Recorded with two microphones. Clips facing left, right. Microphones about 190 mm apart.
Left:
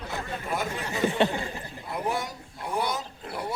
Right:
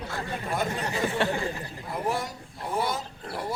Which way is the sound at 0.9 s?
20° left (ahead or behind).